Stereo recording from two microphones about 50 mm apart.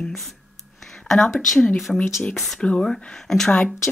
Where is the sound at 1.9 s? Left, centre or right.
Centre.